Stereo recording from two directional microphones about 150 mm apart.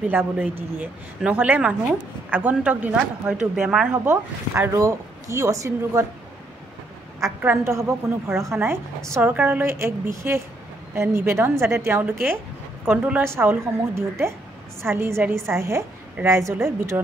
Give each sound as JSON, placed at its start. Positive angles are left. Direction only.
{"t": 0.1, "sound": "a woman's voice", "side_deg": -10}
{"t": 3.9, "sound": "speech", "side_deg": -15}
{"t": 7.4, "sound": "a woman's voice", "side_deg": -20}